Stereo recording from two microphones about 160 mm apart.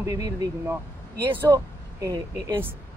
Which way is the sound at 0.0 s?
25° right (ahead or behind).